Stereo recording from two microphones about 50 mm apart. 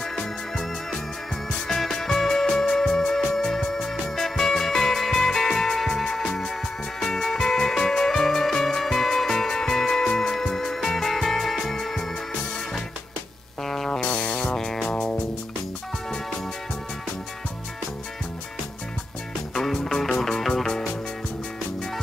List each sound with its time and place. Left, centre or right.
0.0 s music: centre
13.7 s music: centre
14.0 s music: left
19.5 s music: centre